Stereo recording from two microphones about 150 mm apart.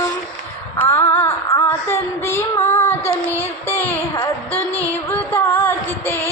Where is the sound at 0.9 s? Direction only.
15° left (ahead or behind).